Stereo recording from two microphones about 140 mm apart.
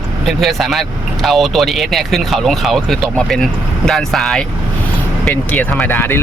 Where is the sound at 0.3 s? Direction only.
Centre (ahead or behind).